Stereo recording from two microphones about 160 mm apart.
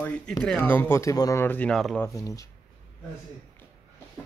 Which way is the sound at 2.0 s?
20° left (ahead or behind).